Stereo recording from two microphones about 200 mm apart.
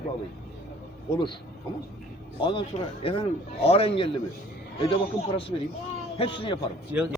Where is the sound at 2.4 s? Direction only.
25° left (ahead or behind).